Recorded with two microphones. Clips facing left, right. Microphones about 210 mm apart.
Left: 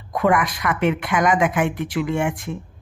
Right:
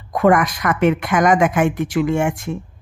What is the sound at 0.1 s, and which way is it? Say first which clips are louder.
Speech: right 4 dB; 45° right (ahead or behind).